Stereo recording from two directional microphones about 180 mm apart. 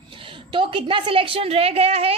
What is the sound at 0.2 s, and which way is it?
A woman's voice, 30° right (ahead or behind).